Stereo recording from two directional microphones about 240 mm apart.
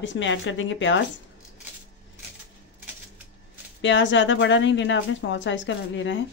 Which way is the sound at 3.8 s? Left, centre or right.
Left.